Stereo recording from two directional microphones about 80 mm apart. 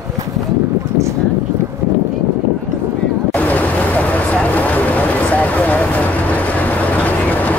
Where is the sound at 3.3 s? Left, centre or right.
Centre.